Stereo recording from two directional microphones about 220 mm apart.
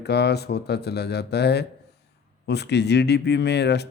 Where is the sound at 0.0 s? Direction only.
50° left (ahead or behind).